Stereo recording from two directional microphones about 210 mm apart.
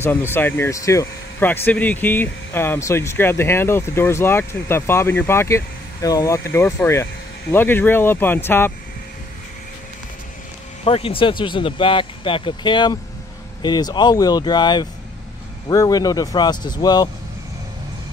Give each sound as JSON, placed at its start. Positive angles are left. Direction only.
{"t": 0.0, "sound": "speech", "side_deg": 10}
{"t": 10.8, "sound": "speech", "side_deg": 25}